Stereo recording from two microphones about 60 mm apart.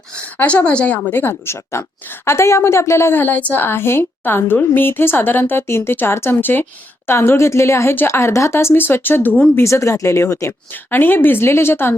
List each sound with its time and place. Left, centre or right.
0.3 s a woman's voice: left
1.2 s a woman's voice: left
8.5 s speech: left
9.6 s a woman's voice: left
10.9 s speech: left